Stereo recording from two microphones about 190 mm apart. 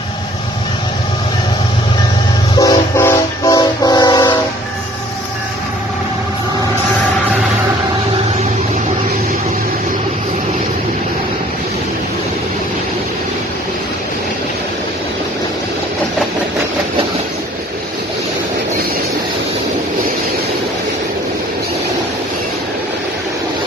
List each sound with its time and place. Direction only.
2.6 s train: 15° left (ahead or behind)